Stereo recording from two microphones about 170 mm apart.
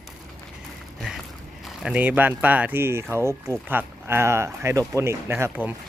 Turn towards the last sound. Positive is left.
turn(degrees=-10)  # may be behind; listen again after turning